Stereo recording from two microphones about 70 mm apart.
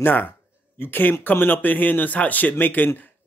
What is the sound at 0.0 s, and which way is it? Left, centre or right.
A man's voice, left.